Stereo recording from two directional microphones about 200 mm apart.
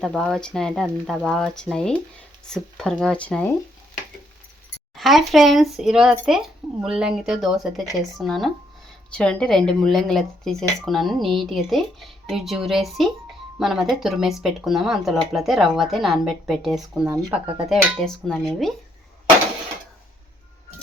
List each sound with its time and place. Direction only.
0.0 s speech: 5° left (ahead or behind)
4.9 s speech: centre (ahead or behind)
17.1 s speech: 15° right (ahead or behind)
17.7 s speech: centre (ahead or behind)